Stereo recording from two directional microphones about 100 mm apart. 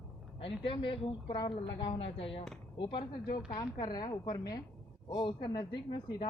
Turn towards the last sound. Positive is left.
turn(degrees=45)  # may be behind; listen again after turning